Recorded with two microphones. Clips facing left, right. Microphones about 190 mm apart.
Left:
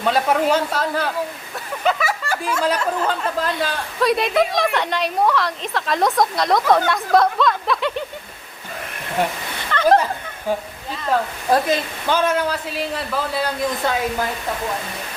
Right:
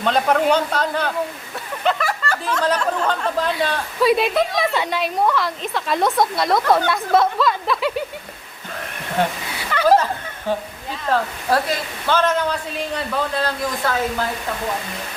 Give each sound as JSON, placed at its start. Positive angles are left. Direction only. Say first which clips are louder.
{"t": 0.0, "sound": "speech", "louder": "even", "side_deg": 5}
{"t": 9.7, "sound": "snicker", "louder": "even", "side_deg": -10}
{"t": 11.5, "sound": "a man's voice", "louder": "left 3 dB", "side_deg": 15}
{"t": 13.8, "sound": "speech", "louder": "even", "side_deg": 20}